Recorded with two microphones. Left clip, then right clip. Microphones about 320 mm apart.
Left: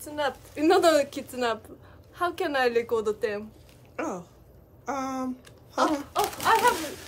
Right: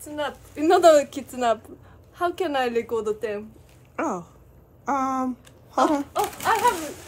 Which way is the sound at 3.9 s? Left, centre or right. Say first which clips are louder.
Right 5 dB; right.